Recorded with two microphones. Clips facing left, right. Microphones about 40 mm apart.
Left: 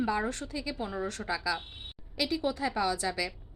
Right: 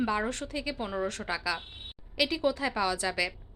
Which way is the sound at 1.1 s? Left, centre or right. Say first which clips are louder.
Even; right.